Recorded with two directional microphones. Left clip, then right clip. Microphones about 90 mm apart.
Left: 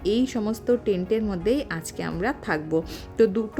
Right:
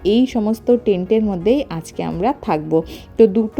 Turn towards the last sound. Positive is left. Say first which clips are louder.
# right 8 dB
turn(degrees=-30)  # may be behind; listen again after turning